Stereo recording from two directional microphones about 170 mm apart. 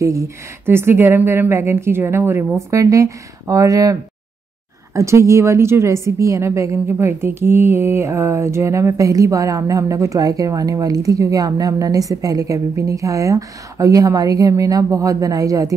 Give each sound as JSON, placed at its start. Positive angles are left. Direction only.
{"t": 0.0, "sound": "a woman's voice", "side_deg": -20}